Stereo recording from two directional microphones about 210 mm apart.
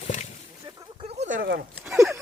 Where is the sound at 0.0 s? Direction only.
35° left (ahead or behind).